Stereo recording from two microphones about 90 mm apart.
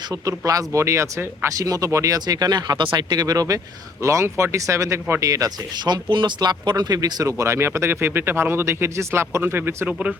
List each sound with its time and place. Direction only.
0.1 s speech: 40° right (ahead or behind)
1.5 s speech: 40° right (ahead or behind); by 9.9 s 25° right (ahead or behind)